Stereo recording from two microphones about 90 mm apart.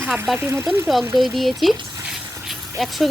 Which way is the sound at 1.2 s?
Centre (ahead or behind).